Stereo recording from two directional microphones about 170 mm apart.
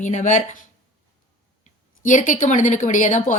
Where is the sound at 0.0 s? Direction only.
45° left (ahead or behind).